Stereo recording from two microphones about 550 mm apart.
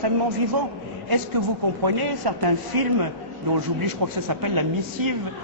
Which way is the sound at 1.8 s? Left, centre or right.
Right.